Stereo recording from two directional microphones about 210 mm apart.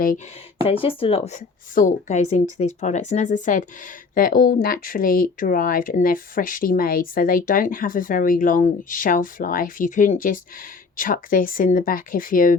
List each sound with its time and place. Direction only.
0.6 s speech: 25° left (ahead or behind); by 12.5 s 40° left (ahead or behind)